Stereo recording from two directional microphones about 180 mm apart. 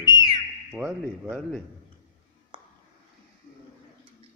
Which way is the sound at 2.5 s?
30° right (ahead or behind).